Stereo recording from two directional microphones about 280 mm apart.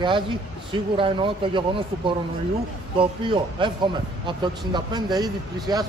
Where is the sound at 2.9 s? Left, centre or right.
Centre.